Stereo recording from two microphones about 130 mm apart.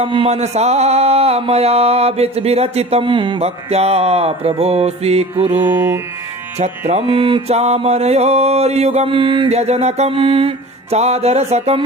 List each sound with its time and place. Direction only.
0.0 s mantra: 45° right (ahead or behind)
5.5 s music: 15° right (ahead or behind)
6.6 s mantra: 55° right (ahead or behind)